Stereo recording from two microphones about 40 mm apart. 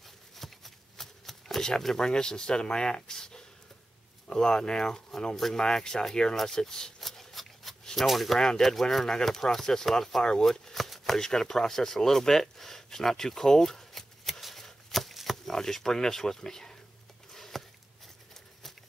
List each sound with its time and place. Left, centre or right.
0.0 s shuffling cards: centre
2.0 s speech: centre
7.0 s a sound: centre
7.9 s speech: centre
8.4 s speech: centre
10.7 s shuffling cards: centre
11.1 s a sound: centre
15.5 s speech: centre
17.3 s a sound: centre